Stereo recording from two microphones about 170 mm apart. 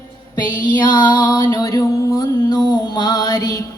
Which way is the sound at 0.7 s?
25° left (ahead or behind).